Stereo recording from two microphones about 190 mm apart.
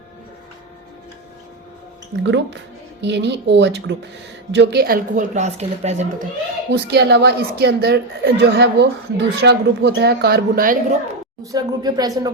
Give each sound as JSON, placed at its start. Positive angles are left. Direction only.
{"t": 2.2, "sound": "a woman's voice", "side_deg": -65}
{"t": 6.7, "sound": "a woman's voice", "side_deg": -60}
{"t": 11.5, "sound": "speech", "side_deg": -20}